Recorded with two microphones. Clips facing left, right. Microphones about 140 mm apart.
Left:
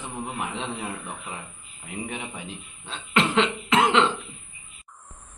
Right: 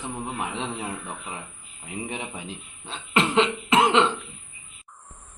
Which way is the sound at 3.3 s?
30° right (ahead or behind).